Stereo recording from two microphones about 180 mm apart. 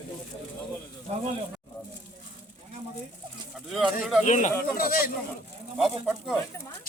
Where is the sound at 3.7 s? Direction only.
Centre (ahead or behind).